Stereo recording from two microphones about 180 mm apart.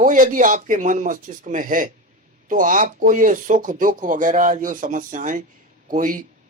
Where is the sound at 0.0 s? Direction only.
45° right (ahead or behind).